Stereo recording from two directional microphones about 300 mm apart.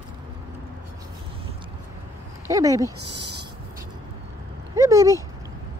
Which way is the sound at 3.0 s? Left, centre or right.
Right.